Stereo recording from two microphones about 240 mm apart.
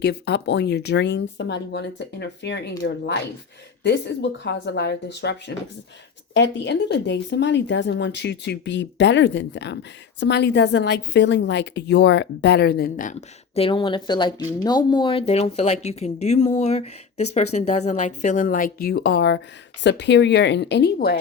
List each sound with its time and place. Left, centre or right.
0.0 s speech: left
13.6 s speech: left